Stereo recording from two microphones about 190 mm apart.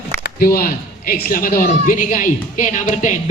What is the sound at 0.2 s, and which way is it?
Speech, 50° left (ahead or behind).